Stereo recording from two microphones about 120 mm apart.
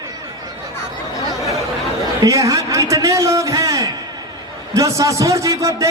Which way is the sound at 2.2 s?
25° right (ahead or behind).